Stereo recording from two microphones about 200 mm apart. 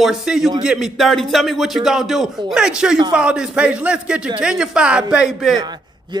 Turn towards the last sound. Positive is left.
turn(degrees=0)  # may be behind; listen again after turning